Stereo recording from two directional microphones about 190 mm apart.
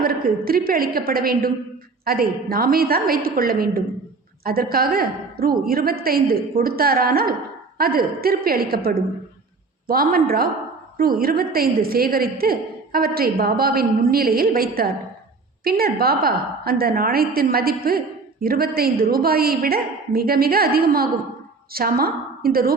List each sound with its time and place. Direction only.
0.0 s a woman's voice: 50° right (ahead or behind)